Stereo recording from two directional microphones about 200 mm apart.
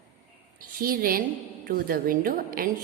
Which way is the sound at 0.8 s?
45° right (ahead or behind).